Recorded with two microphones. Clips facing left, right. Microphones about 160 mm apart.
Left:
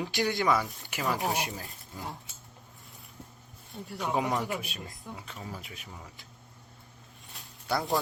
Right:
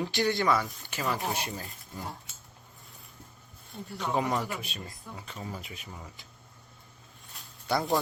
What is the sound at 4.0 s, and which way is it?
Speech, 5° left (ahead or behind).